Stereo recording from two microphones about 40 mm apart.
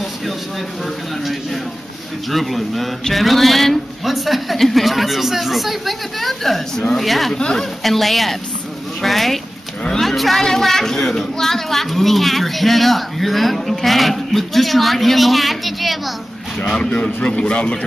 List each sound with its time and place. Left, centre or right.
1.2 s speech: centre
16.9 s a man's voice: left